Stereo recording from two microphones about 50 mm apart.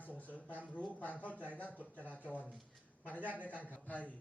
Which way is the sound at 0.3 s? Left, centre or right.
Left.